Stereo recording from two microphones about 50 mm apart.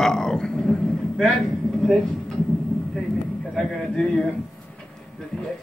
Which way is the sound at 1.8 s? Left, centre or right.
Centre.